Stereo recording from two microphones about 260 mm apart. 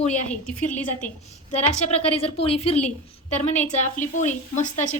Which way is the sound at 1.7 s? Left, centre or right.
Left.